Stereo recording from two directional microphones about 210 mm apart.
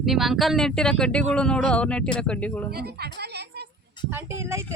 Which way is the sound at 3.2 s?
50° right (ahead or behind).